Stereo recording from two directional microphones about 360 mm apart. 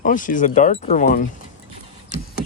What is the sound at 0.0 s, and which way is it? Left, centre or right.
Speech, left.